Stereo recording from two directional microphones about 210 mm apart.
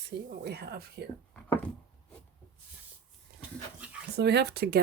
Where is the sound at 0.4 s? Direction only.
50° right (ahead or behind).